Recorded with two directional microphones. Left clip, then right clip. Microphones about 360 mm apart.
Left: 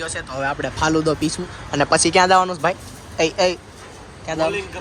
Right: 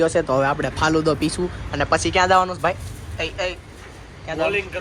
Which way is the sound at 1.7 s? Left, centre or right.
Centre.